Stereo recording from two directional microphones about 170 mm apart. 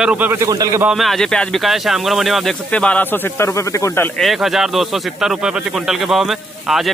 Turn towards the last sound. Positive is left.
turn(degrees=0)  # may be behind; listen again after turning